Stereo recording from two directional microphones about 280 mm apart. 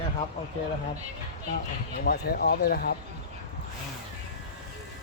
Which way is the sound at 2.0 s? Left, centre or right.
Left.